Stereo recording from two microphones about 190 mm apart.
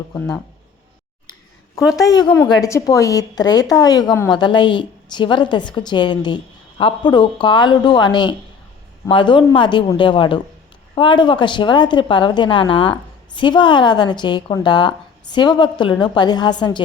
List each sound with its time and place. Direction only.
1.8 s a woman's voice: 5° right (ahead or behind)
2.0 s a woman's voice: 20° left (ahead or behind)